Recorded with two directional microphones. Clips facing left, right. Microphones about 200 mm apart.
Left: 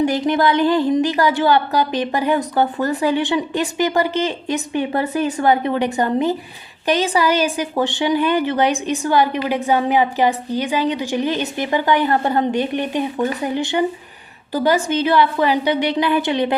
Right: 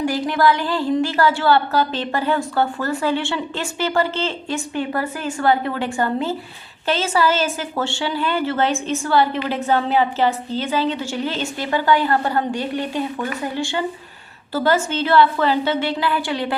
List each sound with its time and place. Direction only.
0.0 s a woman's voice: 20° left (ahead or behind)